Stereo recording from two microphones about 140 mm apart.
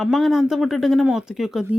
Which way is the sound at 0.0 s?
Centre (ahead or behind).